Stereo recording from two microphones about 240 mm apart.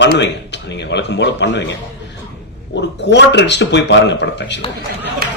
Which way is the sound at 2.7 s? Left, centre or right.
Left.